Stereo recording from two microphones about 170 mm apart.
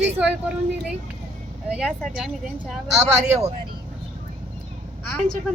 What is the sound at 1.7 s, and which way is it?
Speech, 5° right (ahead or behind).